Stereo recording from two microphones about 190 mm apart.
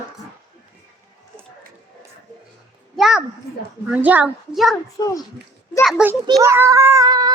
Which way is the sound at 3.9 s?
10° right (ahead or behind).